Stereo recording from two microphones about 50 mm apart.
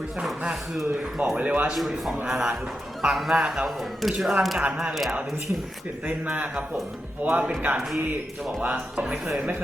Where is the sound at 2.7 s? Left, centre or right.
Centre.